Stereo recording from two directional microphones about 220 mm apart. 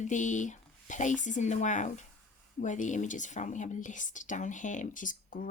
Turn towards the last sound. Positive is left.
turn(degrees=35)  # may be behind; listen again after turning